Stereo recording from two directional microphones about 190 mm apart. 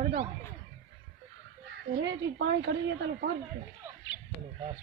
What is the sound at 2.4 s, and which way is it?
Speech, 65° right (ahead or behind).